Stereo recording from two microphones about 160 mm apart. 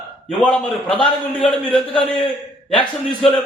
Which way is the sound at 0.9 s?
30° left (ahead or behind).